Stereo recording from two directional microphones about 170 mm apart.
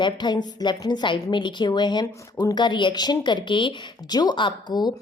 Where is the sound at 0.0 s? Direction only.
25° left (ahead or behind).